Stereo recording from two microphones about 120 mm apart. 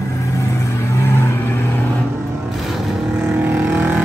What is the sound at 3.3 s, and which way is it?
Vehicle, 15° right (ahead or behind).